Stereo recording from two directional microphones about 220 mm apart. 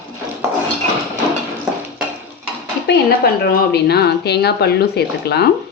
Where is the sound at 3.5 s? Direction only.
45° left (ahead or behind).